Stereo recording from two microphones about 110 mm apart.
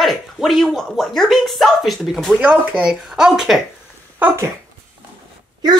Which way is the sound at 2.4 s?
10° right (ahead or behind).